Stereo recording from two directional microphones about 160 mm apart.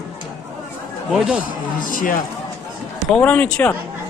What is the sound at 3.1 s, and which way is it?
Speech, 10° left (ahead or behind).